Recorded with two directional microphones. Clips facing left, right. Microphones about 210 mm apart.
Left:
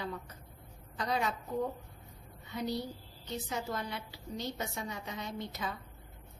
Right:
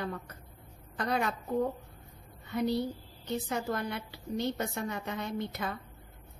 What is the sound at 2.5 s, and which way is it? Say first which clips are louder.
A woman's voice: right 6 dB; 55° right (ahead or behind).